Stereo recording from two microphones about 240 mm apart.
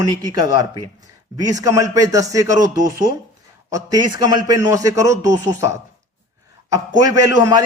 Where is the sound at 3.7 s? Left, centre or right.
Centre.